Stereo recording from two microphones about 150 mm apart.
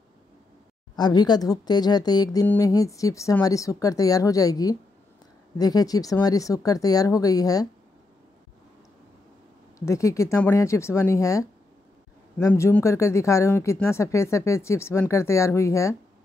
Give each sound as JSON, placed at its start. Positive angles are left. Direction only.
{"t": 0.9, "sound": "speech", "side_deg": 25}
{"t": 9.8, "sound": "speech", "side_deg": 20}